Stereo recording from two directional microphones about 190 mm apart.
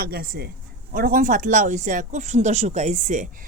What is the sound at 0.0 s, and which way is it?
Speech, 50° right (ahead or behind).